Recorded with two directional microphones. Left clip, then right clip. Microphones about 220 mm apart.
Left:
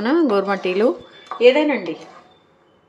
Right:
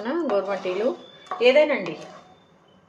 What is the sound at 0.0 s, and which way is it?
Speech, 40° left (ahead or behind).